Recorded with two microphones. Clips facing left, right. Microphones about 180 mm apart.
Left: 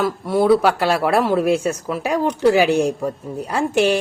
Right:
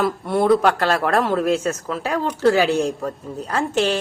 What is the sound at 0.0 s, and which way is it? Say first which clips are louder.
A woman's voice: left 1 dB; centre (ahead or behind).